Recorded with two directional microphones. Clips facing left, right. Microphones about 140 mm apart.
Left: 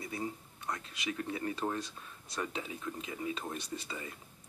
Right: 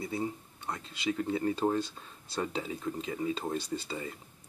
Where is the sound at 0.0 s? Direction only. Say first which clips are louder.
Right 5 dB; 30° right (ahead or behind).